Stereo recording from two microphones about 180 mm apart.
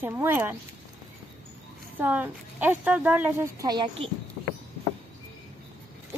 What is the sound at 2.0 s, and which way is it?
A woman's voice, 10° right (ahead or behind).